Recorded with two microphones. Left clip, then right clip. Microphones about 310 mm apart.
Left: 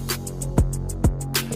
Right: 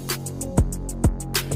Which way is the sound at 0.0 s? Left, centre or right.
Centre.